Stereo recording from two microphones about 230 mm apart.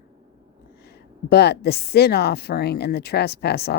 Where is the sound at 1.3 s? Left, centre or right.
Left.